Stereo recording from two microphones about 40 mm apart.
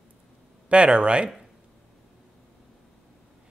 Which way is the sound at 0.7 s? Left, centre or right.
Right.